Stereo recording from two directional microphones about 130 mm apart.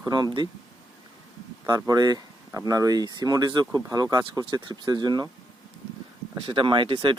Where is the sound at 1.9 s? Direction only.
30° right (ahead or behind).